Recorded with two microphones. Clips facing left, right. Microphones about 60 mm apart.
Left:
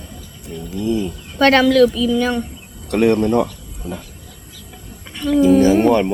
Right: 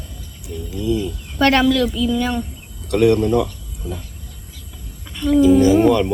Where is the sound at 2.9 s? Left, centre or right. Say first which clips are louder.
Even; left.